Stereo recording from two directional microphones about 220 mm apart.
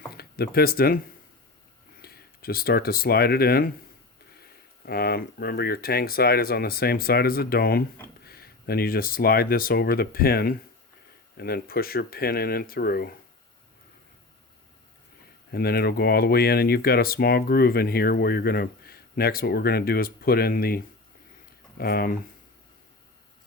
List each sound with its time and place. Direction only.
0.1 s speech: 45° left (ahead or behind)
2.0 s speech: 45° left (ahead or behind)
4.9 s speech: 45° left (ahead or behind)
15.5 s speech: 45° left (ahead or behind)